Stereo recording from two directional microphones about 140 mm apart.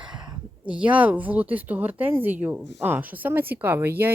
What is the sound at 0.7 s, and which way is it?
Speech, 10° right (ahead or behind).